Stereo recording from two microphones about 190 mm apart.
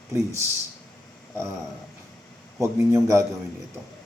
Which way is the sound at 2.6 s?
15° right (ahead or behind).